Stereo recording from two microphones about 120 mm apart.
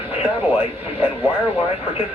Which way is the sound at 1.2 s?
55° left (ahead or behind).